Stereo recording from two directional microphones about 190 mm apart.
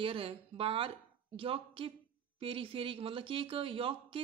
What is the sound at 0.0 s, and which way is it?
Speech, 30° right (ahead or behind).